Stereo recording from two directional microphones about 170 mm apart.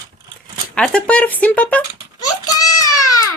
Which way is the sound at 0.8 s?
5° left (ahead or behind).